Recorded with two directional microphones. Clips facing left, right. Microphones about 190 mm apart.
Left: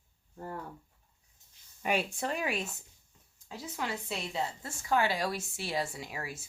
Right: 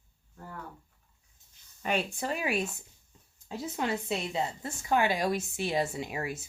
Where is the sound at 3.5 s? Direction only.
25° right (ahead or behind).